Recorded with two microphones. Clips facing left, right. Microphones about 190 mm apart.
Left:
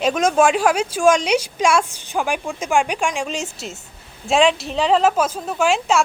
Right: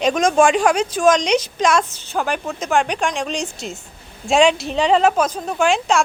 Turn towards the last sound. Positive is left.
turn(degrees=5)  # may be behind; listen again after turning